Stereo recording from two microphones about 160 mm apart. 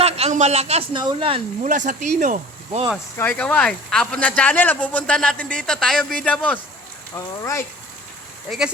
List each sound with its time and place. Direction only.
0.0 s speech: 45° right (ahead or behind)
1.6 s speech: 50° right (ahead or behind)
3.2 s speech: 10° left (ahead or behind)
7.2 s speech: 20° left (ahead or behind)
8.4 s speech: 5° right (ahead or behind)